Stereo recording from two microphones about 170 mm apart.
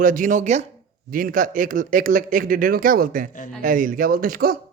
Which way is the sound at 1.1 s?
55° right (ahead or behind).